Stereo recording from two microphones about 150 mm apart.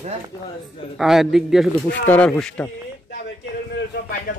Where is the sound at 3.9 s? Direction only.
70° left (ahead or behind).